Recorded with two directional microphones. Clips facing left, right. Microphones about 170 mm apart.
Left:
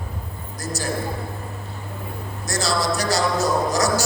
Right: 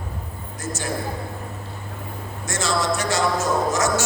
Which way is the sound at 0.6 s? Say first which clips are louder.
Left 1 dB; 35° left (ahead or behind).